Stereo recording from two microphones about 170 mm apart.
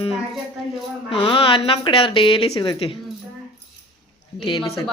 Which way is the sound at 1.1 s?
30° left (ahead or behind).